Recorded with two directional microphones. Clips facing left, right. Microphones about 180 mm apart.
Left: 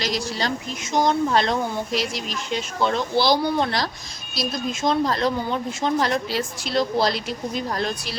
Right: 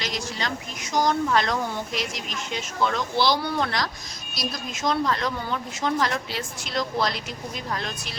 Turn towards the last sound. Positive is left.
turn(degrees=35)  # may be behind; listen again after turning